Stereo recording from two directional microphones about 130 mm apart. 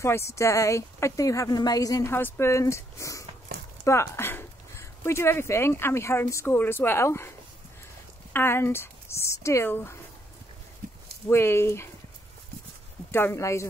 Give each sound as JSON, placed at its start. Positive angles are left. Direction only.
{"t": 0.0, "sound": "speech", "side_deg": 20}
{"t": 2.1, "sound": "speech", "side_deg": 15}
{"t": 11.2, "sound": "speech", "side_deg": 20}
{"t": 13.1, "sound": "speech", "side_deg": 20}